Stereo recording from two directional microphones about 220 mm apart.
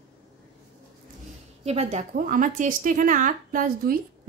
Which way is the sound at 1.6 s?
30° right (ahead or behind).